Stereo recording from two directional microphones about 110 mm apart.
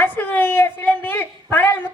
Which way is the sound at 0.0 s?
15° left (ahead or behind).